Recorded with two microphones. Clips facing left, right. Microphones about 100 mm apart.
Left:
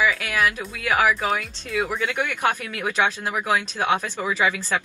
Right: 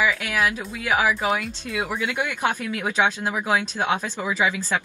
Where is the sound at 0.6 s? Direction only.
5° right (ahead or behind).